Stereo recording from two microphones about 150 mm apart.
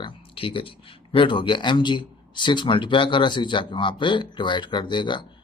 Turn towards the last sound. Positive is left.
turn(degrees=30)  # may be behind; listen again after turning